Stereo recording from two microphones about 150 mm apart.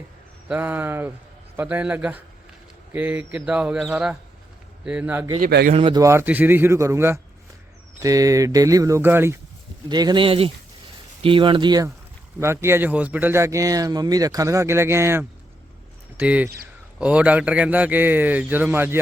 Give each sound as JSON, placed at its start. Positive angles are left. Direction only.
{"t": 0.4, "sound": "speech", "side_deg": -10}
{"t": 5.4, "sound": "speech", "side_deg": -80}
{"t": 5.7, "sound": "speech", "side_deg": -35}
{"t": 6.0, "sound": "speech", "side_deg": -20}
{"t": 9.9, "sound": "speech", "side_deg": -30}
{"t": 12.4, "sound": "speech", "side_deg": -15}